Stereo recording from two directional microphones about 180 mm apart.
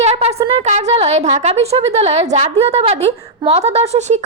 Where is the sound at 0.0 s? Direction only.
35° right (ahead or behind).